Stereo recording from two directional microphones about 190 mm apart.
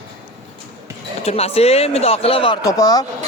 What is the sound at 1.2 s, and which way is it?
Speech, 30° left (ahead or behind).